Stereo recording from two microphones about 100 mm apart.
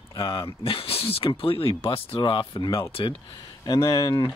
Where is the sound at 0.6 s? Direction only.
65° left (ahead or behind).